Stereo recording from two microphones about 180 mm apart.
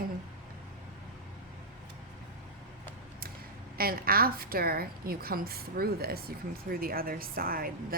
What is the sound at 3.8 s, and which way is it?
A woman's voice, 55° right (ahead or behind).